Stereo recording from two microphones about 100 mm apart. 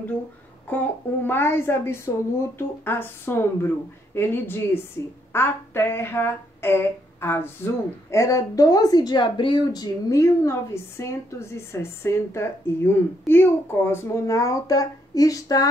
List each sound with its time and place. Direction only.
0.7 s speech: 20° left (ahead or behind); by 15.7 s 35° left (ahead or behind)